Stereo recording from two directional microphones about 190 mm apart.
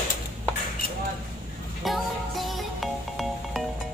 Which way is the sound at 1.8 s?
Centre (ahead or behind).